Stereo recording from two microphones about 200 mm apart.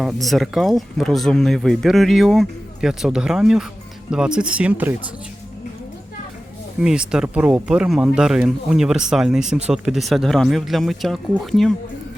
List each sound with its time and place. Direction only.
0.0 s speech: centre (ahead or behind)
6.8 s speech: 5° right (ahead or behind)